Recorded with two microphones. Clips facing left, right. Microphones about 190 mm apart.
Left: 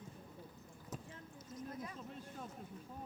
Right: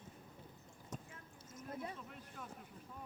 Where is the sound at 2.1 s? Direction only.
30° left (ahead or behind).